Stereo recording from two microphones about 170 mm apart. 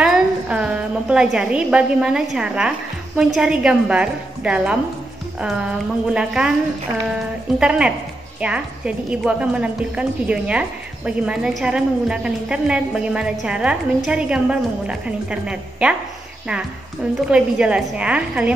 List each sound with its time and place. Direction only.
0.0 s a woman's voice: 5° right (ahead or behind)
6.0 s a woman's voice: 5° right (ahead or behind)
17.3 s a woman's voice: 5° right (ahead or behind)